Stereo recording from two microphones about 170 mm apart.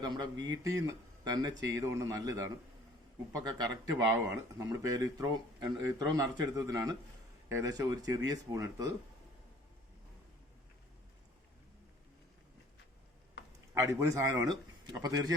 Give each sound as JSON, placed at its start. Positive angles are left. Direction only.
{"t": 0.0, "sound": "a man's voice", "side_deg": -25}
{"t": 13.7, "sound": "a man's voice", "side_deg": -20}